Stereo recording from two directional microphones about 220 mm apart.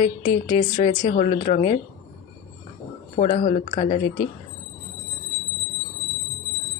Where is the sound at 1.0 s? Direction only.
35° left (ahead or behind).